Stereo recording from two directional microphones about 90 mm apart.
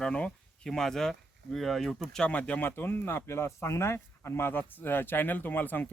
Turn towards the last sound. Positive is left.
turn(degrees=20)  # may be behind; listen again after turning